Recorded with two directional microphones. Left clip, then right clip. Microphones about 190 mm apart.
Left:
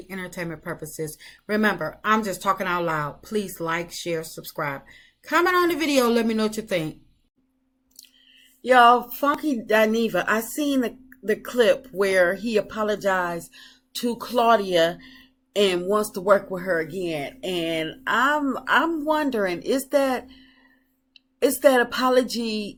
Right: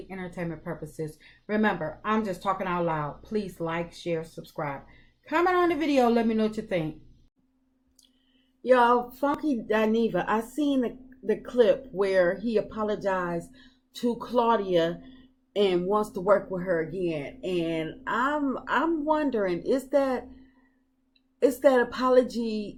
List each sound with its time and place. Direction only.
0.1 s a woman's voice: 15° left (ahead or behind)
8.6 s a woman's voice: 15° left (ahead or behind)